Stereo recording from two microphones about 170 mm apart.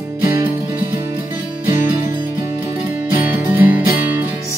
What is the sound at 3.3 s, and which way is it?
Music, 10° right (ahead or behind).